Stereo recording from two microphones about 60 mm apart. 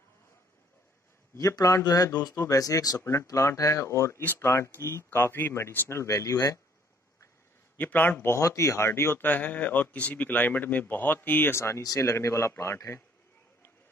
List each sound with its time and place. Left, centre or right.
1.4 s a man's voice: left
3.0 s speech: left
3.4 s speech: left
7.7 s speech: left
8.4 s speech: left
9.2 s speech: left
11.5 s speech: left